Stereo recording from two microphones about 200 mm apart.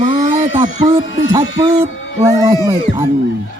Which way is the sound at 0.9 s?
20° right (ahead or behind).